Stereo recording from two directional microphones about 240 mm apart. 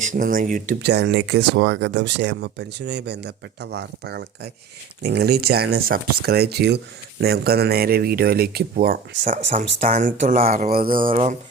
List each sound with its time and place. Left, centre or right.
0.1 s speech: right
9.5 s speech: right